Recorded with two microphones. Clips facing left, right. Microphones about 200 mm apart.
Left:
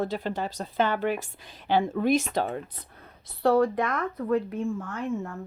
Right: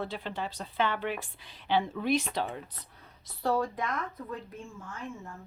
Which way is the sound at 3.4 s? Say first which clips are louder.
Left 8 dB; 65° left (ahead or behind).